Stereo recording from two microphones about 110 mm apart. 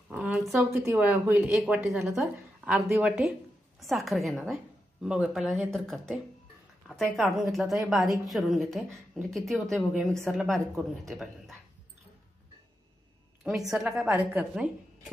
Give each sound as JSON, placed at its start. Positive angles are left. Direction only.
{"t": 0.2, "sound": "speech", "side_deg": 0}
{"t": 0.6, "sound": "speech", "side_deg": -20}
{"t": 1.5, "sound": "a woman's voice", "side_deg": 0}
{"t": 13.4, "sound": "a woman's voice", "side_deg": -5}